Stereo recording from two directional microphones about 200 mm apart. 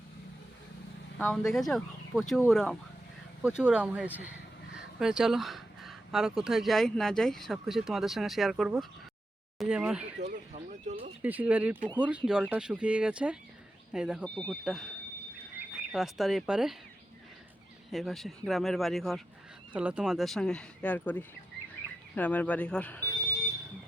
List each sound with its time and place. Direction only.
1.2 s speech: 5° left (ahead or behind)
10.2 s speech: 35° right (ahead or behind)
11.2 s speech: 10° right (ahead or behind)
14.3 s speech: 5° left (ahead or behind)
17.9 s speech: centre (ahead or behind)